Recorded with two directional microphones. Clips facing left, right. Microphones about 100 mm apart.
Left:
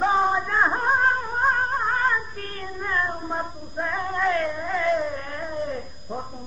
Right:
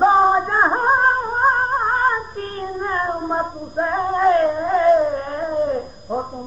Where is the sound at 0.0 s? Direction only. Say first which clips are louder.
Right 7 dB; 35° right (ahead or behind).